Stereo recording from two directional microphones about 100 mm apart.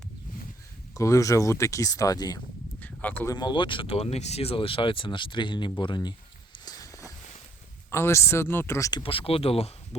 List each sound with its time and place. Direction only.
0.9 s speech: 30° left (ahead or behind)
2.8 s a sound: 15° left (ahead or behind)
3.3 s speech: 50° left (ahead or behind)
6.7 s walk: 35° left (ahead or behind)
7.9 s speech: 25° left (ahead or behind)
9.0 s speech: 70° left (ahead or behind)